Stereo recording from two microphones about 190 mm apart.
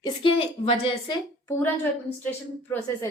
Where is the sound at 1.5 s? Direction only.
10° left (ahead or behind).